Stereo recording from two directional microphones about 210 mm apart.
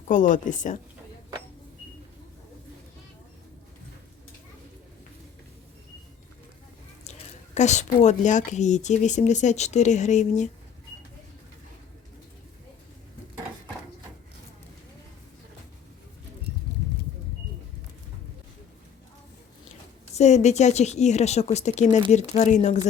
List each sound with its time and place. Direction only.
0.1 s a woman's voice: 35° left (ahead or behind)
7.0 s a woman's voice: 35° left (ahead or behind)
20.1 s a woman's voice: 30° left (ahead or behind)